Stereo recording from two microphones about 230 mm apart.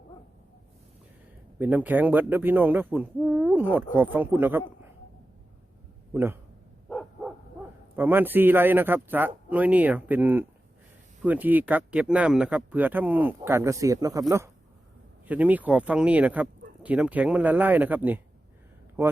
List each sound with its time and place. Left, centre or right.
1.5 s speech: centre
6.8 s dog: centre
7.9 s speech: centre